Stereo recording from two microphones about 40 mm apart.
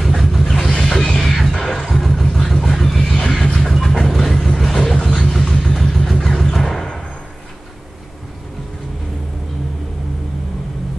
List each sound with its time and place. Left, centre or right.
0.0 s vehicle: centre
0.7 s a sound: centre
1.3 s music: centre
2.2 s vehicle: centre
3.0 s neigh: centre
3.6 s train: centre
4.6 s vehicle: centre
5.3 s a sound: centre